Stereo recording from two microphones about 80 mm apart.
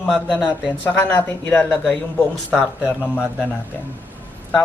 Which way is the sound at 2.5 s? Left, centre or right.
Centre.